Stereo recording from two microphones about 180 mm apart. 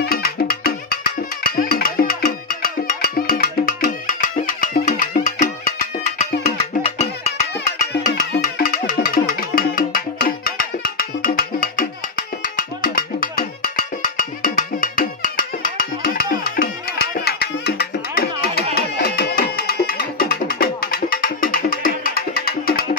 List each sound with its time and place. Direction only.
0.0 s music: 55° left (ahead or behind); by 7.3 s 35° left (ahead or behind)
8.3 s music: 50° left (ahead or behind)